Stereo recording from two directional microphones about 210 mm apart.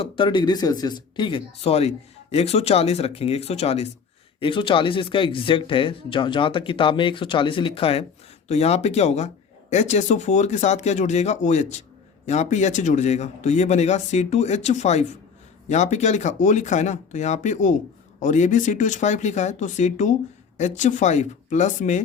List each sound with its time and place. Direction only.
0.0 s speech: 25° left (ahead or behind)